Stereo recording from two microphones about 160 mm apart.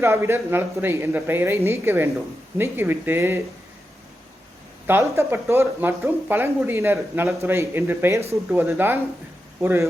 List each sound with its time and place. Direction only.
0.0 s speech: 15° right (ahead or behind)
4.9 s speech: 15° right (ahead or behind)